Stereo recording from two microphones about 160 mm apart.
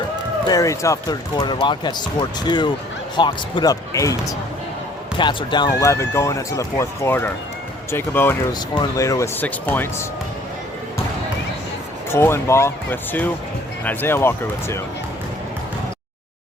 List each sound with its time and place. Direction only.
0.4 s speech: 20° left (ahead or behind)
5.8 s speech: 20° left (ahead or behind)
12.1 s speech: 15° left (ahead or behind)